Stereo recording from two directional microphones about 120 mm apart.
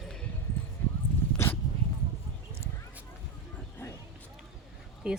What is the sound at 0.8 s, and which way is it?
Dog, 15° left (ahead or behind).